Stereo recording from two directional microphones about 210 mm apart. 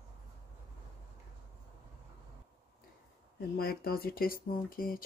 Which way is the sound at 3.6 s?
45° left (ahead or behind).